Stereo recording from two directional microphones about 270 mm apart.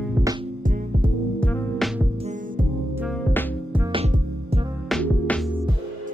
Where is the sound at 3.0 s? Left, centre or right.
Centre.